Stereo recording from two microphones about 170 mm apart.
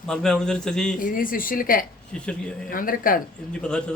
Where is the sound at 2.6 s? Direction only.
55° left (ahead or behind).